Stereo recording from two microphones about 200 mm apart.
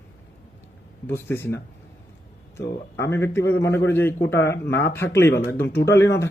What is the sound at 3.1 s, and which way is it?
Speech, 10° left (ahead or behind).